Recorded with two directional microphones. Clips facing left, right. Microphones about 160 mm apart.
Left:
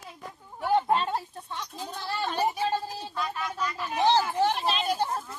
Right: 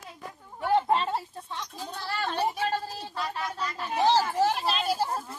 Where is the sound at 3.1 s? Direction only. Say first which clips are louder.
Even; 30° right (ahead or behind).